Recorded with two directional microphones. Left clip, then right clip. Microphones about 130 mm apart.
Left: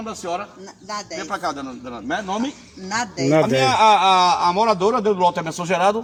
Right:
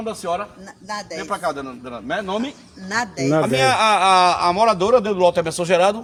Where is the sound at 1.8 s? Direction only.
20° right (ahead or behind).